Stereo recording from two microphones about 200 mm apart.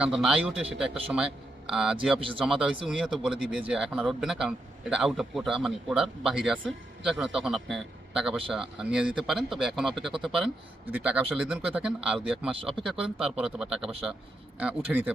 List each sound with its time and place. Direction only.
0.0 s a man's voice: 5° right (ahead or behind)
2.1 s speech: 25° right (ahead or behind)
2.4 s a man's voice: 5° right (ahead or behind)